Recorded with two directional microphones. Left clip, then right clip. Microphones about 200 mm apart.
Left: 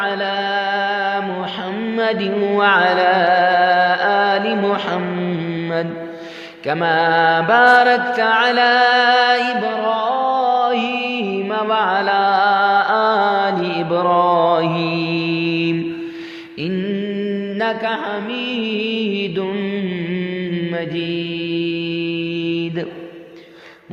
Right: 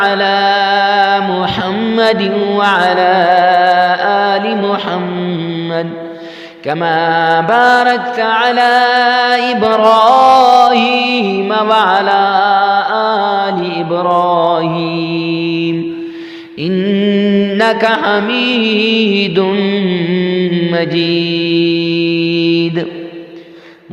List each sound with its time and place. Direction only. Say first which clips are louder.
0.0 s mantra: right 9 dB; 35° right (ahead or behind); by 4.9 s 20° right (ahead or behind)
6.7 s mantra: right 3 dB; 20° right (ahead or behind)
9.6 s music: right 11 dB; 40° right (ahead or behind); by 15.7 s 15° right (ahead or behind)
16.6 s mantra: right 9 dB; 30° right (ahead or behind)